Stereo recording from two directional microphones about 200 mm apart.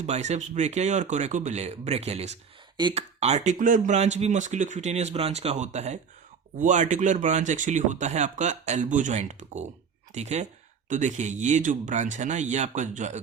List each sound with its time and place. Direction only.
0.0 s speech: 35° right (ahead or behind)